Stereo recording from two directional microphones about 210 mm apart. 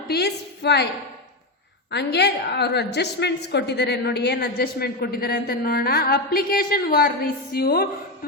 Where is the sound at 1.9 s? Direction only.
55° left (ahead or behind).